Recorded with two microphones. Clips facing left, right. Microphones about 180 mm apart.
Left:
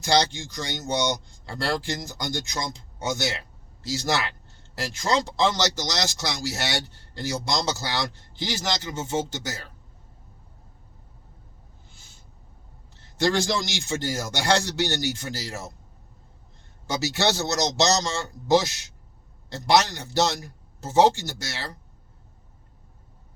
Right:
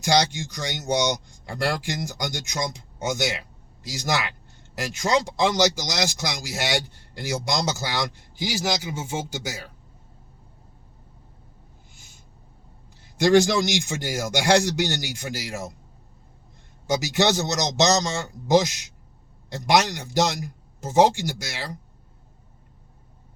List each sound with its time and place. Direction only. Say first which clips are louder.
0.0 s speech: right 1 dB; 15° right (ahead or behind)
13.0 s speech: right 6 dB; 15° right (ahead or behind)
16.8 s speech: right 3 dB; 15° right (ahead or behind)